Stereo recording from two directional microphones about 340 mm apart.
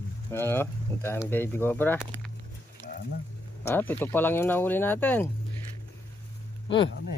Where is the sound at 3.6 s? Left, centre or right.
Centre.